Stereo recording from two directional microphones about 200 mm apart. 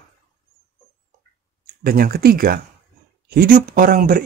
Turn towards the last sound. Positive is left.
turn(degrees=-45)  # may be behind; listen again after turning